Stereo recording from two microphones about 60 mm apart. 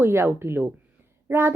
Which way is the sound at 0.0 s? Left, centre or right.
Right.